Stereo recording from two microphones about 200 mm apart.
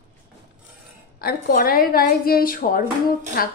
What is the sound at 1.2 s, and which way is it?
A woman's voice, 50° left (ahead or behind).